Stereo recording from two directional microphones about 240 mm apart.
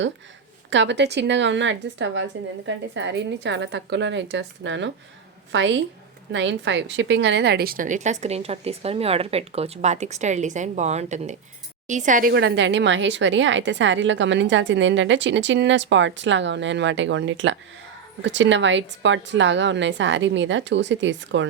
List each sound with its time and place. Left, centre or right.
0.7 s a woman's voice: right